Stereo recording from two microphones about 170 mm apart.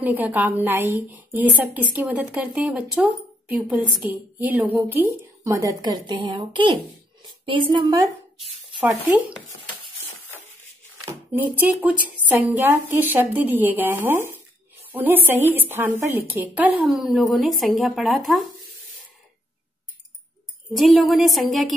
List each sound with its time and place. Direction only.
0.0 s a woman's voice: 10° right (ahead or behind); by 8.5 s 30° right (ahead or behind)
9.0 s a woman's voice: 10° right (ahead or behind)
11.3 s a woman's voice: 10° right (ahead or behind)
20.7 s a woman's voice: centre (ahead or behind)